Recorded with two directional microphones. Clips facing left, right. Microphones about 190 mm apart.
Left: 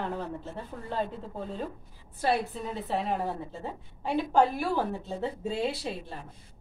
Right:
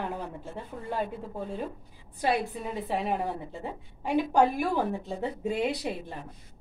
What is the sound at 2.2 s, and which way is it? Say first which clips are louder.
Speech: even; 15° right (ahead or behind).